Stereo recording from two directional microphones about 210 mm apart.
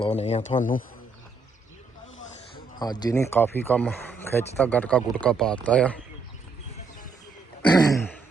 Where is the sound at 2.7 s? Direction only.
20° left (ahead or behind).